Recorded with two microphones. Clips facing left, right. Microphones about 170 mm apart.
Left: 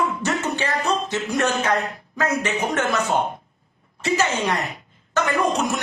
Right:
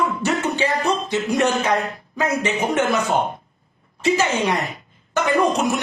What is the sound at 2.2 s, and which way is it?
A woman's voice, 10° right (ahead or behind).